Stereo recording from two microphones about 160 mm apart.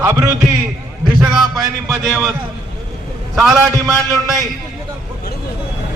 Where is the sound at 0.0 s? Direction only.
15° right (ahead or behind).